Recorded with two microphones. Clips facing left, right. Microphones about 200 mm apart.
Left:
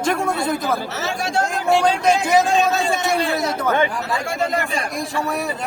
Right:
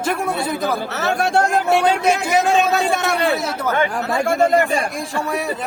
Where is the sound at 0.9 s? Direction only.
60° right (ahead or behind).